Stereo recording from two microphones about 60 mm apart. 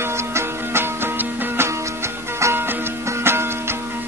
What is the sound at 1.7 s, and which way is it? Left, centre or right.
Music, right.